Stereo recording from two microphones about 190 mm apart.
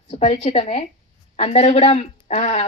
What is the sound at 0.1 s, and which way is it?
A woman's voice, 35° left (ahead or behind).